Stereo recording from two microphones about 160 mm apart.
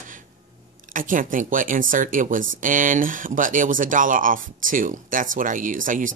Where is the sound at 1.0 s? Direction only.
55° right (ahead or behind).